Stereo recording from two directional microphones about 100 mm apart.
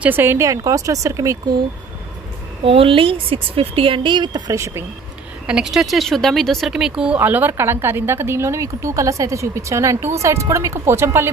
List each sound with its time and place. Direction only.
0.0 s speech: 20° right (ahead or behind)
2.6 s speech: 70° right (ahead or behind); by 4.4 s 50° right (ahead or behind)
4.5 s speech: 30° right (ahead or behind)
5.5 s speech: 5° right (ahead or behind)
7.2 s speech: 20° right (ahead or behind)